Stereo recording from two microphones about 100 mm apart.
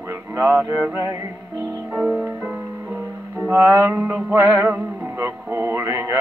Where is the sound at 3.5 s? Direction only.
25° right (ahead or behind).